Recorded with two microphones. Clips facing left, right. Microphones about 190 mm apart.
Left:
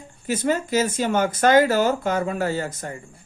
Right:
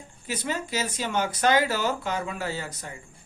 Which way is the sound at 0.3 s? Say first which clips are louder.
Left 8 dB; 50° left (ahead or behind).